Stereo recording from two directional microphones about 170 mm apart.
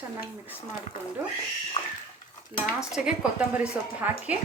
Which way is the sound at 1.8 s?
35° left (ahead or behind).